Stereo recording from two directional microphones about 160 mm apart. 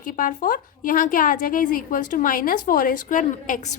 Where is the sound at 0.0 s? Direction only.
55° left (ahead or behind).